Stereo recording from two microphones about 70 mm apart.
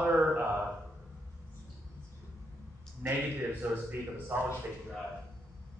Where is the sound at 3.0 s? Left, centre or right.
Right.